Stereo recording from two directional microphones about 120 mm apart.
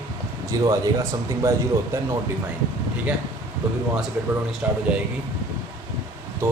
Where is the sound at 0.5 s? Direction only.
35° right (ahead or behind).